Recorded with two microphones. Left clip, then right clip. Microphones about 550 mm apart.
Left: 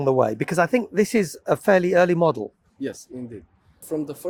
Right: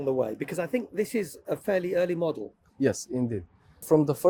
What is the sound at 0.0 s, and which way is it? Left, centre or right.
Speech, left.